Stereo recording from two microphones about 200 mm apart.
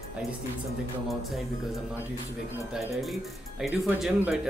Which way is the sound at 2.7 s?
Centre (ahead or behind).